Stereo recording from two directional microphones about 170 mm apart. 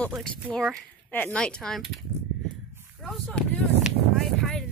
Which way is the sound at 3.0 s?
5° left (ahead or behind).